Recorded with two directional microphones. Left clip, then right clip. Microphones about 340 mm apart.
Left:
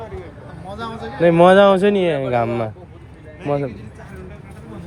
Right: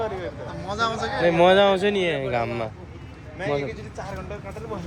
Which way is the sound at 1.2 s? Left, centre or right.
Centre.